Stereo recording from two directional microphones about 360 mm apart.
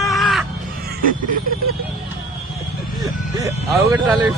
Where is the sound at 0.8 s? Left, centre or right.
Right.